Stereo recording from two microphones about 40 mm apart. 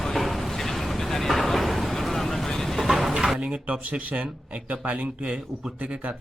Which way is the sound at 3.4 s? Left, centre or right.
Right.